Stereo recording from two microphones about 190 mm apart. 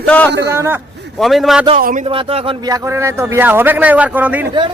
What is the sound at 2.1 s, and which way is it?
A man's voice, 30° right (ahead or behind).